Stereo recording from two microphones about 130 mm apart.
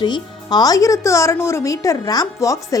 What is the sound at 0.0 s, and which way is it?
Speech, 35° left (ahead or behind).